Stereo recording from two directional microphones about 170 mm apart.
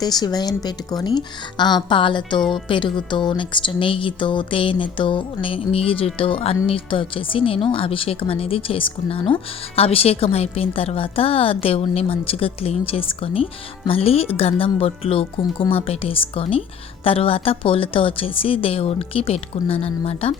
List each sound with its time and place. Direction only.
0.0 s a woman's voice: 25° left (ahead or behind)